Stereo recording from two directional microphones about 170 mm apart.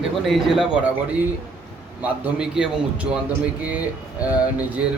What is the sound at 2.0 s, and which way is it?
A man's voice, 5° right (ahead or behind).